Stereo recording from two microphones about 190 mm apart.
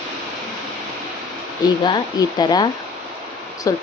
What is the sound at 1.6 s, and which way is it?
Speech, 20° left (ahead or behind).